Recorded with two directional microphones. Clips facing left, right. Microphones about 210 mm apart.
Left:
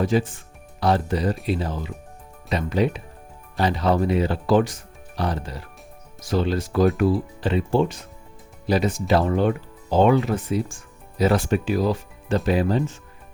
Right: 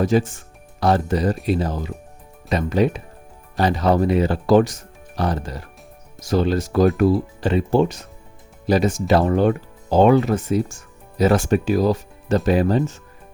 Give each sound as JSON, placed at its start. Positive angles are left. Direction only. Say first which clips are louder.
{"t": 0.0, "sound": "speech", "louder": "right 3 dB", "side_deg": -45}